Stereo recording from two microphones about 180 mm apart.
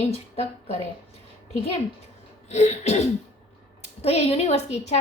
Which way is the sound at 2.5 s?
40° left (ahead or behind).